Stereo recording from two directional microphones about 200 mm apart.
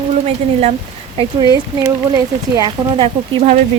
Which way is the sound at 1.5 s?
20° right (ahead or behind).